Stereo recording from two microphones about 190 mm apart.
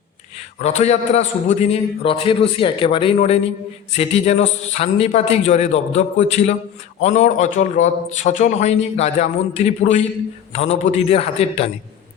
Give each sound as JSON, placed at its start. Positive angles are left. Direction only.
{"t": 0.6, "sound": "a man's voice", "side_deg": 35}